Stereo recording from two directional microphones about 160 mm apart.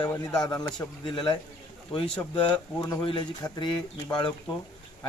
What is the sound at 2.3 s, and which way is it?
Speech, 25° left (ahead or behind).